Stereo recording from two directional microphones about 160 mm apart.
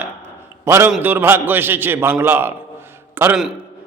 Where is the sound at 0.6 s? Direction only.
15° right (ahead or behind).